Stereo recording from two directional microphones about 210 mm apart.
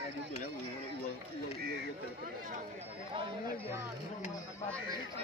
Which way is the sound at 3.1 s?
25° right (ahead or behind).